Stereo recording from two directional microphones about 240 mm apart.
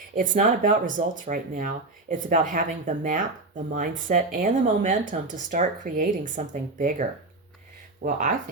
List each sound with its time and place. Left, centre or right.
0.2 s speech: right